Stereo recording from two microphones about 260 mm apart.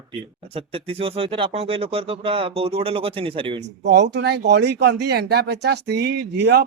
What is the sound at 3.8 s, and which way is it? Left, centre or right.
Speech, right.